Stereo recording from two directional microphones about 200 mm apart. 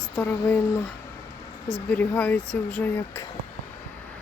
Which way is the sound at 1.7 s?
5° left (ahead or behind).